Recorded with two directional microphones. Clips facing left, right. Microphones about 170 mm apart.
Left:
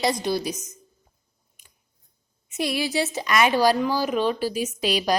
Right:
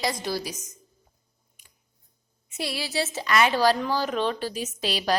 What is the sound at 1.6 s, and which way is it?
Scissors, 20° left (ahead or behind).